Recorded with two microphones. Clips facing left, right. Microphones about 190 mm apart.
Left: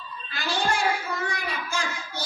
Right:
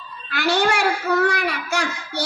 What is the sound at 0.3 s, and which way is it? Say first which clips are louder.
A child's voice: right 7 dB; 75° right (ahead or behind).